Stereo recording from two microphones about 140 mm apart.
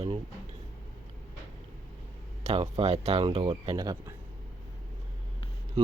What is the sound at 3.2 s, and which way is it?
Speech, 35° right (ahead or behind).